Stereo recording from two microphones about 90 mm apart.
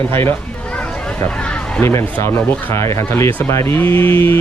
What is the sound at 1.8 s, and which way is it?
Speech, 30° left (ahead or behind).